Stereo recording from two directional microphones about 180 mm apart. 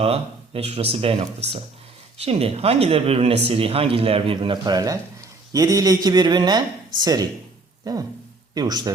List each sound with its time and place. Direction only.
0.0 s speech: 35° right (ahead or behind)